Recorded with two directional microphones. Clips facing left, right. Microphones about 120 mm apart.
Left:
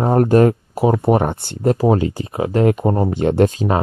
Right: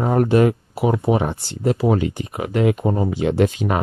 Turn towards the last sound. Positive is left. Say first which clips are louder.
# left 3 dB
turn(degrees=50)  # may be behind; listen again after turning